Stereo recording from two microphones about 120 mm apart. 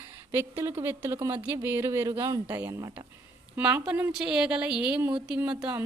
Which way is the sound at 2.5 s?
15° right (ahead or behind).